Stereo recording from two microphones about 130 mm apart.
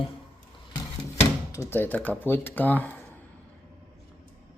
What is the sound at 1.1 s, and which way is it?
Speech, 25° left (ahead or behind).